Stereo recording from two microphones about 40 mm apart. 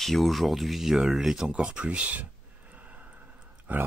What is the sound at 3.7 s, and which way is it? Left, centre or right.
Speech, right.